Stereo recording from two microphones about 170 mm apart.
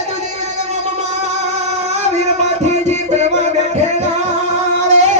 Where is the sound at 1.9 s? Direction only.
40° right (ahead or behind).